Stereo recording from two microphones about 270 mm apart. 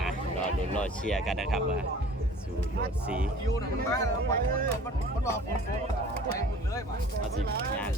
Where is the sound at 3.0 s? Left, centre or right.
Centre.